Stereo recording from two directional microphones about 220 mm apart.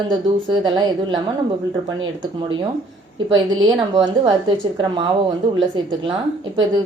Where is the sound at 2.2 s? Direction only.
20° right (ahead or behind).